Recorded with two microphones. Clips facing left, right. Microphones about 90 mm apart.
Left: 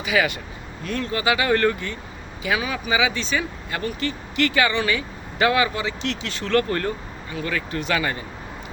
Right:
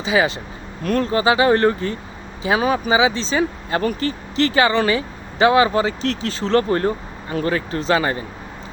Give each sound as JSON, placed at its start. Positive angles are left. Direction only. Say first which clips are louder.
{"t": 0.0, "sound": "speech", "louder": "right 4 dB", "side_deg": -25}
{"t": 7.3, "sound": "speech", "louder": "right 6 dB", "side_deg": -40}